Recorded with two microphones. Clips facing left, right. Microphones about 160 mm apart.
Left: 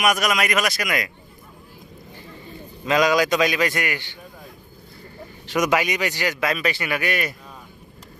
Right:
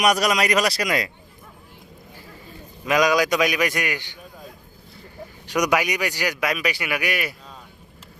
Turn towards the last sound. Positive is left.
turn(degrees=-10)  # may be behind; listen again after turning